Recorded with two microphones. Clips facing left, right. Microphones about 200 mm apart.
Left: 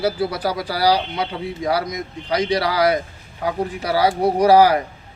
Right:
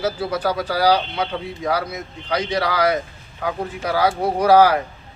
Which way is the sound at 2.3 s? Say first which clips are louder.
Left 3 dB; 10° left (ahead or behind).